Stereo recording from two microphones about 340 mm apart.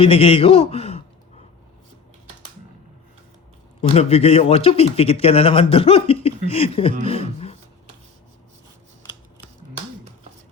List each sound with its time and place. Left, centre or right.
0.0 s a man's voice: centre
3.8 s a man's voice: centre